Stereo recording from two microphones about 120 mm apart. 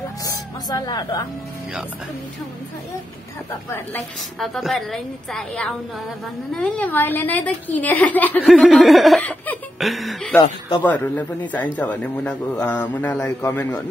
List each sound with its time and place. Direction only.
0.7 s speech: 35° left (ahead or behind)
4.4 s a woman's voice: centre (ahead or behind)
8.6 s a woman's voice: centre (ahead or behind)
9.2 s music: 10° left (ahead or behind)
9.8 s a woman's voice: centre (ahead or behind)
10.8 s a woman's voice: 15° left (ahead or behind)